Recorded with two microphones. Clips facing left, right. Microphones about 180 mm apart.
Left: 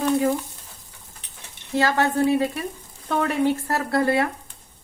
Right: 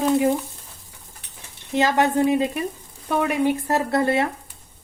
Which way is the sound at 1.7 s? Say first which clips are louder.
Right 2 dB; 20° right (ahead or behind).